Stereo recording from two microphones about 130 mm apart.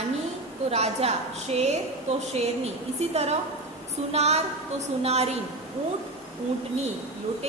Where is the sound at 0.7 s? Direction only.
55° right (ahead or behind).